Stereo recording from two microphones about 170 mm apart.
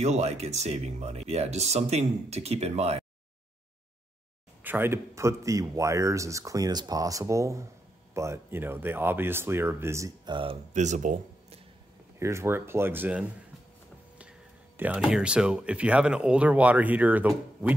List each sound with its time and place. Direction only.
0.0 s speech: 40° right (ahead or behind)
4.6 s speech: 15° right (ahead or behind); by 10.6 s 30° right (ahead or behind)
10.7 s speech: 45° right (ahead or behind)
12.2 s speech: 15° right (ahead or behind)
15.0 s speech: 5° right (ahead or behind)